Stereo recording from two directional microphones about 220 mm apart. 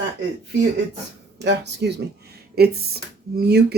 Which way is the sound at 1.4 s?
50° right (ahead or behind).